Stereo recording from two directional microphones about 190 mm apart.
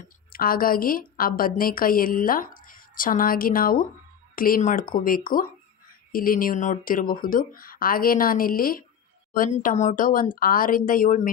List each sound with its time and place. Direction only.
0.3 s a woman's voice: 50° left (ahead or behind)